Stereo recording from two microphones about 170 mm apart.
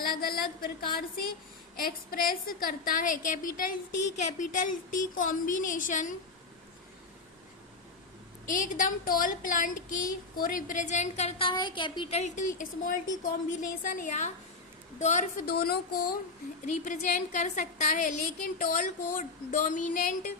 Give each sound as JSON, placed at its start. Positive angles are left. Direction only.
{"t": 0.0, "sound": "a sound", "side_deg": 60}
{"t": 1.7, "sound": "a woman's voice", "side_deg": 60}
{"t": 8.4, "sound": "a woman's voice", "side_deg": 50}
{"t": 12.2, "sound": "a woman's voice", "side_deg": 50}
{"t": 15.4, "sound": "a sound", "side_deg": 65}
{"t": 16.6, "sound": "a woman's voice", "side_deg": 50}